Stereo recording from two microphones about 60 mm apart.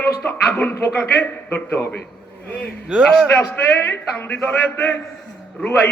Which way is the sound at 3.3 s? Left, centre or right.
Left.